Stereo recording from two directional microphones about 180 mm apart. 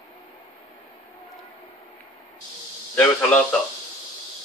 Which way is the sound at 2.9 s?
10° left (ahead or behind).